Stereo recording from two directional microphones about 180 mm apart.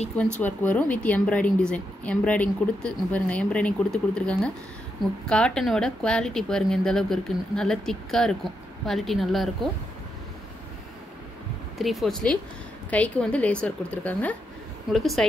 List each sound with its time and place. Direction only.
0.2 s speech: 10° left (ahead or behind)
11.8 s speech: centre (ahead or behind)